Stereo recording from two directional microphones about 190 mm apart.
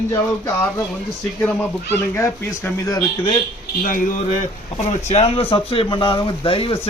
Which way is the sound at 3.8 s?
45° left (ahead or behind).